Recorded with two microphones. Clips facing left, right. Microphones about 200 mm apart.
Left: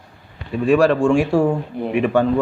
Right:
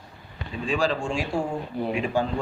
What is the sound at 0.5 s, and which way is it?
Speech, 65° left (ahead or behind).